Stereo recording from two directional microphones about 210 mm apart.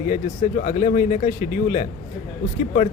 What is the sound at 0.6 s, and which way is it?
Speech, 35° left (ahead or behind).